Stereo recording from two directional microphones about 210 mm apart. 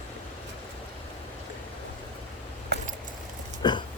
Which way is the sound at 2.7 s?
50° right (ahead or behind).